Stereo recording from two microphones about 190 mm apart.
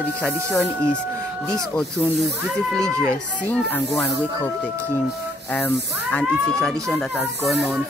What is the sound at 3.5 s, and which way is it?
Speech, 5° left (ahead or behind).